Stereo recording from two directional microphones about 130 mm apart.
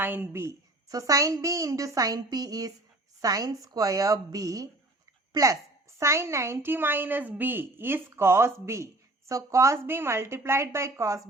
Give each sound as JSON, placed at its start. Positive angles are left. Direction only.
{"t": 0.0, "sound": "a woman's voice", "side_deg": -15}